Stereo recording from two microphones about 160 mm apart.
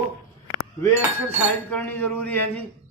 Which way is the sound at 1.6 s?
10° left (ahead or behind).